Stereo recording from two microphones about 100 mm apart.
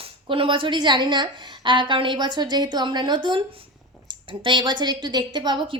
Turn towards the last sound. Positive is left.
turn(degrees=-55)  # may be behind; listen again after turning